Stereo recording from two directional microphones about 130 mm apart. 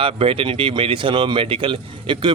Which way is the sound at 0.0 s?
45° right (ahead or behind).